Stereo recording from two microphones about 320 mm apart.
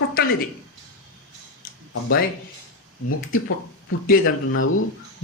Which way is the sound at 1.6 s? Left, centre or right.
Left.